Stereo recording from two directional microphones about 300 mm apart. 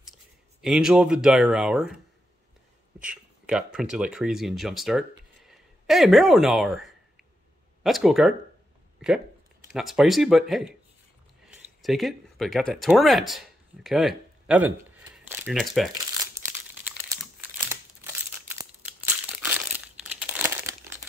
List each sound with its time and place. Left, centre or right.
0.6 s speech: centre
3.0 s speech: centre
11.8 s speech: centre
16.4 s crumpling: right
19.4 s crumpling: centre